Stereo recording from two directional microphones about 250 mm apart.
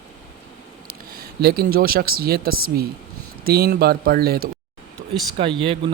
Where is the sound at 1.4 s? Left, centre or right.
Right.